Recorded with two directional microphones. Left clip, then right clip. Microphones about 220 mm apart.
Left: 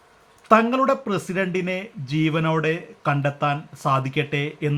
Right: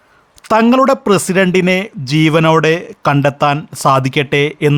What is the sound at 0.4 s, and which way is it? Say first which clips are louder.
Speech: right 7 dB; 55° right (ahead or behind).